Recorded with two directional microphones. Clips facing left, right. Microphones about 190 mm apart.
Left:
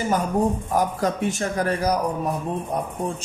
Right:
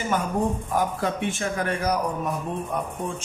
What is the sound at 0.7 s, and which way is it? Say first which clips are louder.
A man's voice: left 2 dB; 40° left (ahead or behind).